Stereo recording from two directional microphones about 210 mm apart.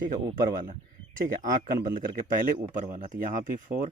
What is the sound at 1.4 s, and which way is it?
Speech, 40° right (ahead or behind).